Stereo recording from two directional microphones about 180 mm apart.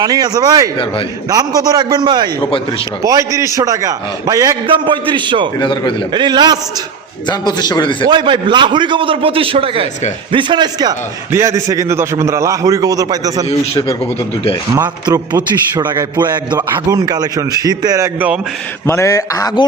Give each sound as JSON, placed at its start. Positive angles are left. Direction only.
{"t": 0.0, "sound": "a man's voice", "side_deg": -20}
{"t": 5.5, "sound": "a man's voice", "side_deg": 25}
{"t": 6.1, "sound": "a man's voice", "side_deg": -25}
{"t": 7.3, "sound": "a man's voice", "side_deg": 25}
{"t": 8.0, "sound": "a man's voice", "side_deg": -25}
{"t": 14.8, "sound": "a man's voice", "side_deg": -20}
{"t": 18.9, "sound": "a man's voice", "side_deg": 15}